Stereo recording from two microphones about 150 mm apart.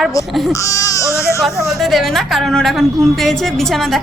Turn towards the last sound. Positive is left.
turn(degrees=0)  # may be behind; listen again after turning